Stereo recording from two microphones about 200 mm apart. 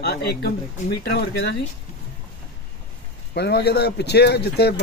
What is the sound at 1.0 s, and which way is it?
Speech, 55° left (ahead or behind).